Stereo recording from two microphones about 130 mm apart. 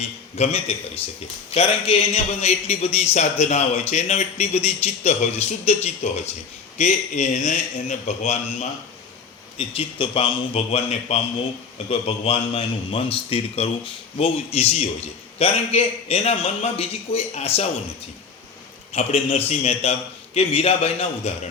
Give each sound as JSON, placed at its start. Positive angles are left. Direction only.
{"t": 0.3, "sound": "a man's voice", "side_deg": 55}
{"t": 9.6, "sound": "a man's voice", "side_deg": 45}
{"t": 10.7, "sound": "a man's voice", "side_deg": 55}
{"t": 18.9, "sound": "a man's voice", "side_deg": 55}